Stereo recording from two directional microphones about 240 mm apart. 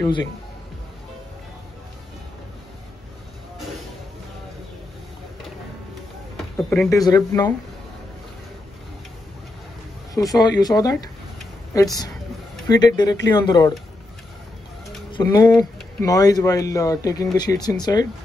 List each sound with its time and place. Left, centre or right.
6.7 s speech: centre
10.1 s speech: centre
15.0 s speech: centre